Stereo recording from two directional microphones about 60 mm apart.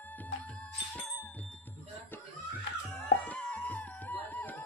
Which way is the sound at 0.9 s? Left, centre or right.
Left.